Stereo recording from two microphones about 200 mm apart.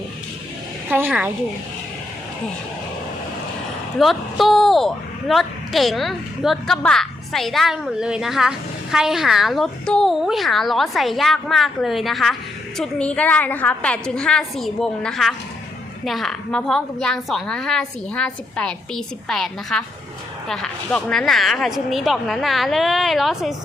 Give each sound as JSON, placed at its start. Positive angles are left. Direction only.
{"t": 0.9, "sound": "a woman's voice", "side_deg": -10}
{"t": 3.9, "sound": "a woman's voice", "side_deg": 0}